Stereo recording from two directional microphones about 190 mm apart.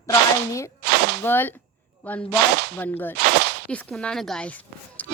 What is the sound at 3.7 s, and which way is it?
Speech, 5° left (ahead or behind).